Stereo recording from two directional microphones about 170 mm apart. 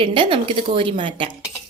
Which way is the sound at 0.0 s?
30° right (ahead or behind).